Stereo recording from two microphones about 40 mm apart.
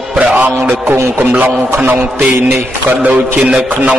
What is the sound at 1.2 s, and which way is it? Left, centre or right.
Music, right.